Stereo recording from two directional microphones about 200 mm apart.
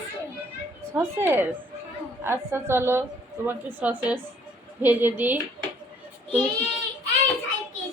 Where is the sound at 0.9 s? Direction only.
10° right (ahead or behind).